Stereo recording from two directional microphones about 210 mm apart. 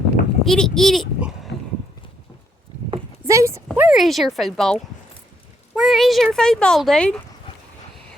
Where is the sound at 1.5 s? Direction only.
50° left (ahead or behind).